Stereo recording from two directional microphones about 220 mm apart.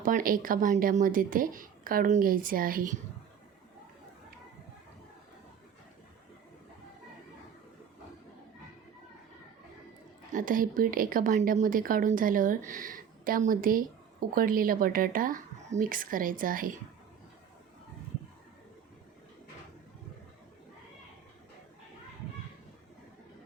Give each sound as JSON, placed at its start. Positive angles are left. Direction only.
{"t": 0.0, "sound": "a woman's voice", "side_deg": -40}
{"t": 10.3, "sound": "a woman's voice", "side_deg": -40}